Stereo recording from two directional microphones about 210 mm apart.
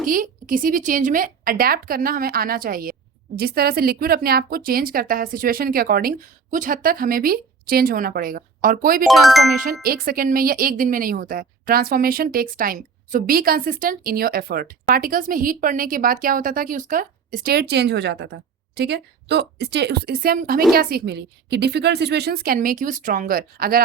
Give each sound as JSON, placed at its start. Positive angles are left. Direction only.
{"t": 0.1, "sound": "a woman's voice", "side_deg": -40}
{"t": 9.0, "sound": "speech", "side_deg": 0}
{"t": 9.8, "sound": "speech", "side_deg": -45}